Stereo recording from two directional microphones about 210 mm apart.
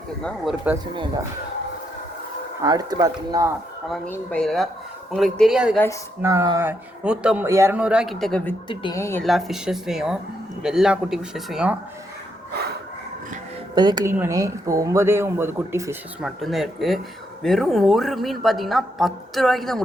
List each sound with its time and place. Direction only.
0.2 s a woman's voice: 5° left (ahead or behind)
2.6 s speech: 20° right (ahead or behind)
3.8 s a woman's voice: 5° left (ahead or behind)
6.2 s a woman's voice: 15° right (ahead or behind); by 8.5 s 5° left (ahead or behind)
8.7 s speech: 20° left (ahead or behind)
9.2 s a woman's voice: centre (ahead or behind)
13.7 s speech: 20° right (ahead or behind)
16.4 s a woman's voice: centre (ahead or behind)